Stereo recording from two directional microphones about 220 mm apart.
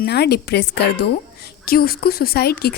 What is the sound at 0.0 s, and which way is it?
A woman's voice, 50° left (ahead or behind).